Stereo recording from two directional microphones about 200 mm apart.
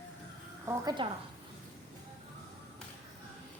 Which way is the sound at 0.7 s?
20° right (ahead or behind).